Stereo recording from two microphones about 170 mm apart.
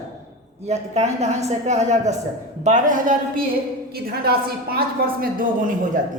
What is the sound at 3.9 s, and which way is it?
Speech, 65° right (ahead or behind).